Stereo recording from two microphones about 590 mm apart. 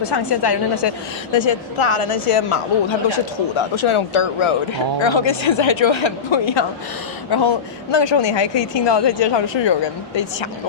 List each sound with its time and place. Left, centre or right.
0.0 s a woman's voice: left